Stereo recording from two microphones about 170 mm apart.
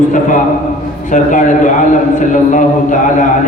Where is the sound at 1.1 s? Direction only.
50° left (ahead or behind).